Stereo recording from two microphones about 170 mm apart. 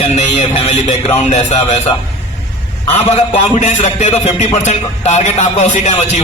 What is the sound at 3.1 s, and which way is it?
A man's voice, 45° left (ahead or behind).